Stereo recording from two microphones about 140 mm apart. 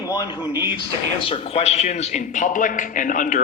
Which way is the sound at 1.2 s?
40° left (ahead or behind).